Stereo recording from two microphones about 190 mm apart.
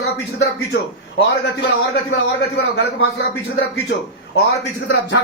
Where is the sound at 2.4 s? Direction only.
60° left (ahead or behind).